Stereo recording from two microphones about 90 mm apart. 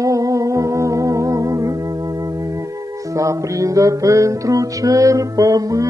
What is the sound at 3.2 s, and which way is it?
Music, 35° right (ahead or behind).